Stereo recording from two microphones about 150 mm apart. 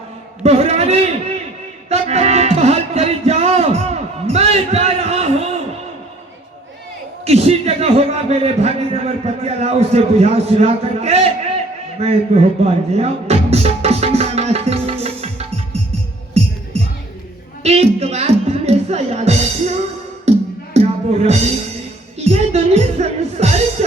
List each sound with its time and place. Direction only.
0.4 s a man's voice: 45° right (ahead or behind)
1.9 s music: 45° right (ahead or behind)
4.3 s a sound: 45° right (ahead or behind)
7.3 s a sound: 45° right (ahead or behind)
16.4 s music: 45° right (ahead or behind)
17.6 s speech: 45° right (ahead or behind)
20.2 s music: 45° right (ahead or behind)
22.2 s speech: 45° right (ahead or behind)